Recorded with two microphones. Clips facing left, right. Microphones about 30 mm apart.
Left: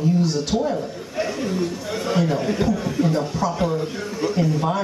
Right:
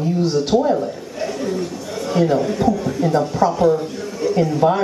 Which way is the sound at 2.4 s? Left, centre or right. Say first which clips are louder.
Right 3 dB; centre.